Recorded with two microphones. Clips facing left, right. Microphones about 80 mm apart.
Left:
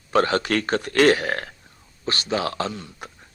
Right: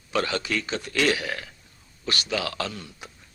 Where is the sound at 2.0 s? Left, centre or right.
Left.